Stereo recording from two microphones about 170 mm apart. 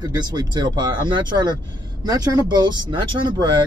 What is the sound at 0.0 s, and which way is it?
Speech, 25° right (ahead or behind).